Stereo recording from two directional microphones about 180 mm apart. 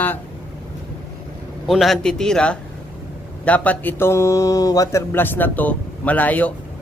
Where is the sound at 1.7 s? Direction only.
Centre (ahead or behind).